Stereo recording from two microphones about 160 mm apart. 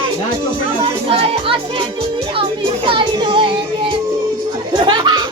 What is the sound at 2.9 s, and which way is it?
Music, 30° right (ahead or behind).